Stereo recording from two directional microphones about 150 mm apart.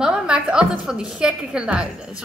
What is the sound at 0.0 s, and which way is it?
A woman's voice, 5° right (ahead or behind).